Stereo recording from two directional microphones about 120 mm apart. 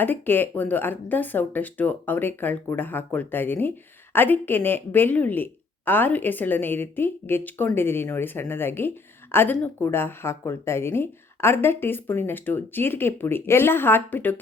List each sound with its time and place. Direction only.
0.0 s speech: 15° left (ahead or behind)